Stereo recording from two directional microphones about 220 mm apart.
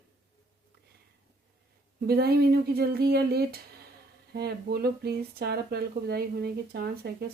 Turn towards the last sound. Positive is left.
turn(degrees=-45)  # may be behind; listen again after turning